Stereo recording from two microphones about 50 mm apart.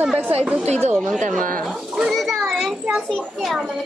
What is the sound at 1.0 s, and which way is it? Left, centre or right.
Speech, centre.